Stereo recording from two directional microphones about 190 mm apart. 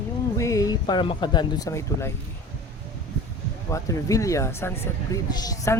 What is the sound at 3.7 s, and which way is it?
A woman's voice, 15° left (ahead or behind).